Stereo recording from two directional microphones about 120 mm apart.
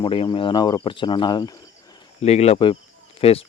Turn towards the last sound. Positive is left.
turn(degrees=55)  # may be behind; listen again after turning